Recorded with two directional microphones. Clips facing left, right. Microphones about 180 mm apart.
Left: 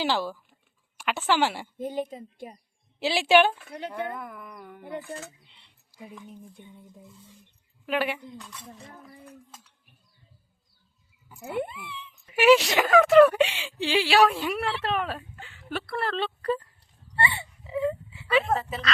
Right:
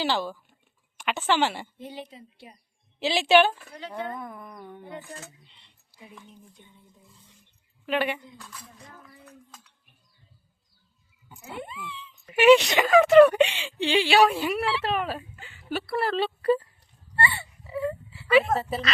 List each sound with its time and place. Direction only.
0.0 s a woman's voice: 10° left (ahead or behind)
1.8 s speech: 50° left (ahead or behind)
3.0 s a woman's voice: 10° left (ahead or behind)
4.3 s music: 25° right (ahead or behind)
5.5 s a sound: 10° left (ahead or behind)
6.0 s speech: centre (ahead or behind)
6.6 s a woman's voice: 10° left (ahead or behind)
7.9 s speech: 5° left (ahead or behind)
11.5 s speech: 65° left (ahead or behind)
12.4 s speech: 5° left (ahead or behind)
17.2 s whimper: 20° left (ahead or behind)
18.3 s a woman's voice: 5° right (ahead or behind)